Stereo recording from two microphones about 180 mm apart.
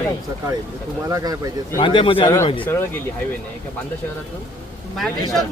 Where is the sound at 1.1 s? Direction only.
20° right (ahead or behind).